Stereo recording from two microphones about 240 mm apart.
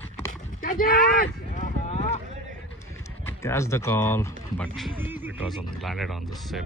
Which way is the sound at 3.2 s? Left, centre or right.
Centre.